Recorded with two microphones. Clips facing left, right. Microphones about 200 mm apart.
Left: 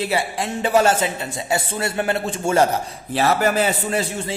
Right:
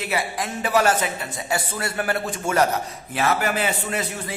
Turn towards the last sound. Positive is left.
turn(degrees=30)  # may be behind; listen again after turning